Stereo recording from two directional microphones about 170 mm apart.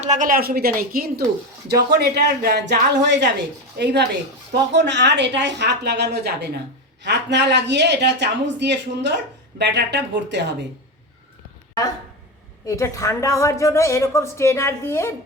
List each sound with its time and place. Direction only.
0.0 s speech: 45° right (ahead or behind)
1.6 s speech: 75° right (ahead or behind); by 3.3 s 90° right
3.8 s speech: 75° right (ahead or behind)
4.7 s speech: 90° right; by 6.5 s 75° right (ahead or behind)
7.0 s speech: 90° right
12.6 s a woman's voice: 20° left (ahead or behind)